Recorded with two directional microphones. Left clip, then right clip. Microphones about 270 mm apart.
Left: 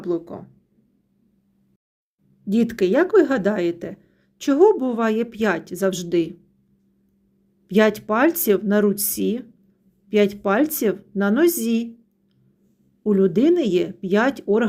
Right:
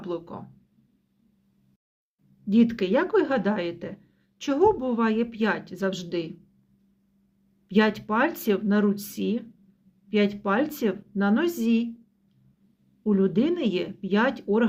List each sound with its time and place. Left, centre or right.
0.0 s speech: left
2.5 s speech: left
7.7 s speech: left
13.1 s speech: left